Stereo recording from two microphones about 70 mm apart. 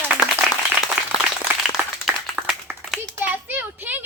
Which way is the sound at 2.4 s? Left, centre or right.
Right.